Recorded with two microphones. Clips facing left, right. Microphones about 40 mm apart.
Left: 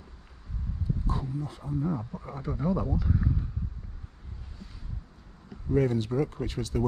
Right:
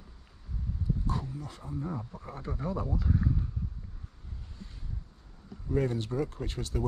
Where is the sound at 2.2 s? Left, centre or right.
Left.